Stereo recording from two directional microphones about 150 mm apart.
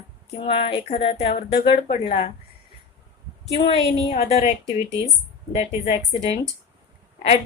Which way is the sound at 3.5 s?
40° left (ahead or behind).